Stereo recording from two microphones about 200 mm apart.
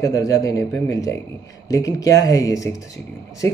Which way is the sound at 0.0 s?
15° left (ahead or behind).